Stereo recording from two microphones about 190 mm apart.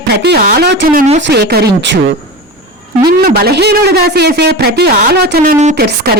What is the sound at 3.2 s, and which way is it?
A woman's voice, 55° right (ahead or behind).